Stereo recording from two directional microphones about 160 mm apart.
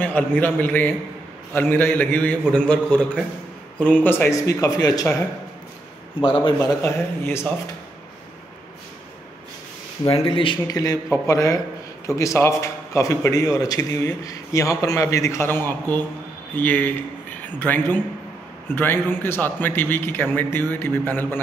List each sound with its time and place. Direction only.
0.0 s a man's voice: 10° left (ahead or behind)
6.2 s a man's voice: 25° left (ahead or behind)
6.8 s a man's voice: 15° left (ahead or behind)
10.0 s a man's voice: 35° left (ahead or behind); by 21.4 s 10° left (ahead or behind)